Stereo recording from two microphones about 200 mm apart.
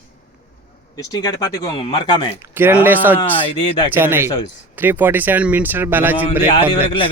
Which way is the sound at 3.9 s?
10° right (ahead or behind).